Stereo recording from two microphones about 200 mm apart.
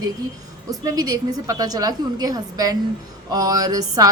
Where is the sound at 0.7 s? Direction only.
20° right (ahead or behind).